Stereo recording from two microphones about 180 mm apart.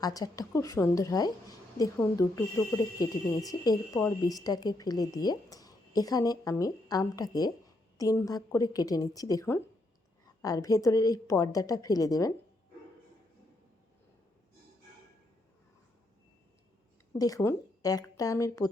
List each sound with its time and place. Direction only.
0.0 s a woman's voice: 20° left (ahead or behind)
17.2 s a woman's voice: 20° left (ahead or behind)